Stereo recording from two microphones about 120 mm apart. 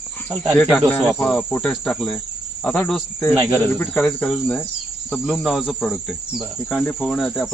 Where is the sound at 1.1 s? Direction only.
5° left (ahead or behind).